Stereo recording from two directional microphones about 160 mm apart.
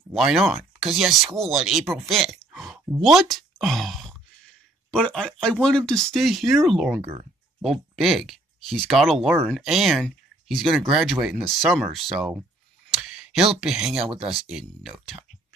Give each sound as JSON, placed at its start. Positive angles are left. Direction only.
{"t": 0.1, "sound": "speech", "side_deg": 0}